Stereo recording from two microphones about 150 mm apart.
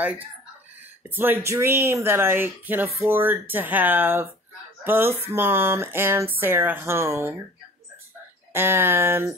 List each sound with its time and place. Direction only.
0.0 s speech: 10° right (ahead or behind)
8.5 s speech: 15° right (ahead or behind)